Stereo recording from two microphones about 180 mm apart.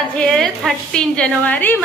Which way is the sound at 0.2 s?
5° left (ahead or behind).